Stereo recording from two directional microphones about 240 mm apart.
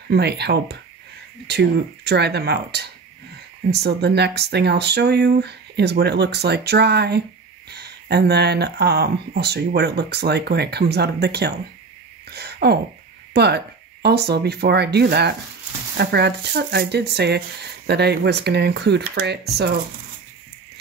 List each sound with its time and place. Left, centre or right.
0.1 s speech: right
12.3 s a sound: right
13.3 s speech: right